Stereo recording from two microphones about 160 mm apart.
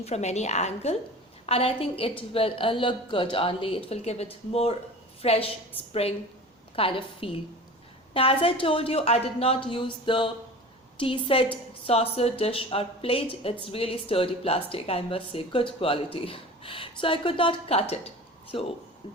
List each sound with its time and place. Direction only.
0.0 s a woman's voice: 45° left (ahead or behind)